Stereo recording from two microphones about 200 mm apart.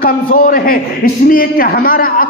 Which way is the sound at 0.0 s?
45° left (ahead or behind).